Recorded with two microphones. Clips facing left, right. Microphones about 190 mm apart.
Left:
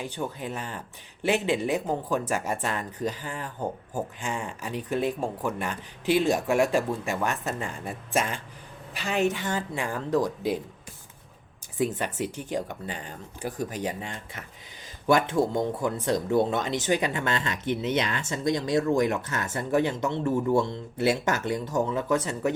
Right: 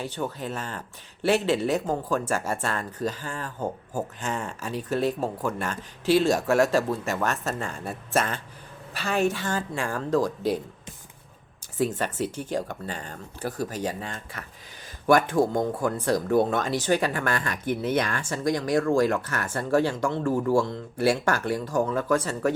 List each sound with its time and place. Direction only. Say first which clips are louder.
0.0 s speech: right 2 dB; 15° left (ahead or behind)
11.8 s speech: right 1 dB; 15° left (ahead or behind)